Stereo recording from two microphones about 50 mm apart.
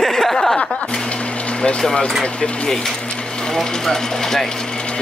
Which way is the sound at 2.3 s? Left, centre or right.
Centre.